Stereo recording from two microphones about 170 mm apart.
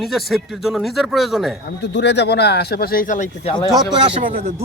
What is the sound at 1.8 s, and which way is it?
Speech, 90° left.